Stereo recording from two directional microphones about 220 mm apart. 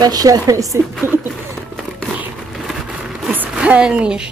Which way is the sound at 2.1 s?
Centre (ahead or behind).